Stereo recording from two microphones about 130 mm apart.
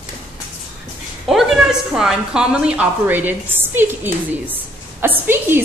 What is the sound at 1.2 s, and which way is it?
A woman's voice, centre (ahead or behind).